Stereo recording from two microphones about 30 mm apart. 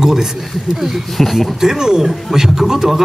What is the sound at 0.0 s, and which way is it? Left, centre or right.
Speech, centre.